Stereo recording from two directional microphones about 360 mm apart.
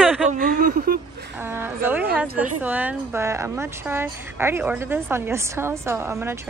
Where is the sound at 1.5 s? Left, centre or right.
Centre.